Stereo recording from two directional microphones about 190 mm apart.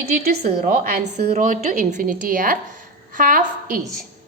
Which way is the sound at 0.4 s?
40° right (ahead or behind).